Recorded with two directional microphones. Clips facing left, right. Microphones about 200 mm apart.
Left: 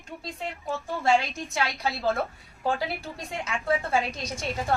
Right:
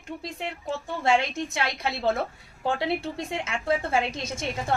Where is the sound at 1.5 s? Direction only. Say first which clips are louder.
Even; 25° right (ahead or behind).